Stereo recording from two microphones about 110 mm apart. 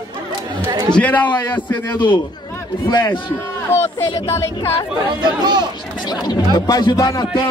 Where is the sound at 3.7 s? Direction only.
20° left (ahead or behind).